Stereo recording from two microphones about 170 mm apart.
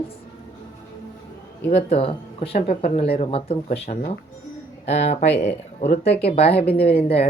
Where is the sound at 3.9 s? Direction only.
55° left (ahead or behind).